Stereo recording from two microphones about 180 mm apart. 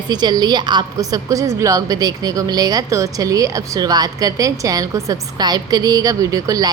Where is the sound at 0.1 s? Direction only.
20° right (ahead or behind).